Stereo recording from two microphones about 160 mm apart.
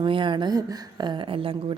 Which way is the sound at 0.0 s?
30° right (ahead or behind).